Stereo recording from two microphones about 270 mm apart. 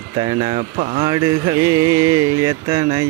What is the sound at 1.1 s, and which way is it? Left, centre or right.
Mantra, centre.